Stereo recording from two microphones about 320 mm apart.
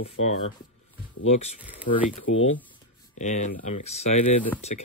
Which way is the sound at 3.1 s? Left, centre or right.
Left.